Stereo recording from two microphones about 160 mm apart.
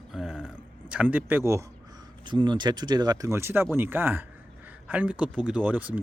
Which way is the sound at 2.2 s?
30° right (ahead or behind).